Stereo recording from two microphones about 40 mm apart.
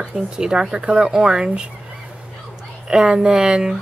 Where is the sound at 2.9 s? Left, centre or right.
Centre.